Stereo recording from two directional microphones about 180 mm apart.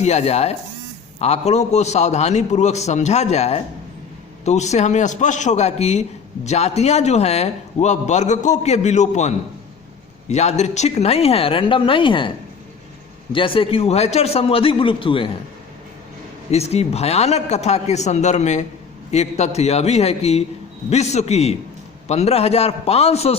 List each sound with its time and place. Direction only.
0.0 s a man's voice: 35° left (ahead or behind)
13.3 s a man's voice: 30° left (ahead or behind)
16.5 s a man's voice: 35° left (ahead or behind)